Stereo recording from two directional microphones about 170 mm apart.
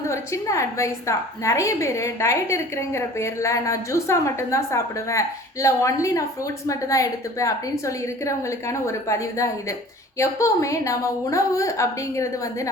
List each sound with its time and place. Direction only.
0.1 s a woman's voice: 15° left (ahead or behind)